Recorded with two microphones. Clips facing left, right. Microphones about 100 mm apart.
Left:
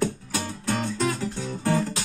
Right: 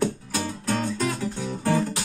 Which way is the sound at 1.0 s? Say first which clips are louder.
Even; 15° right (ahead or behind).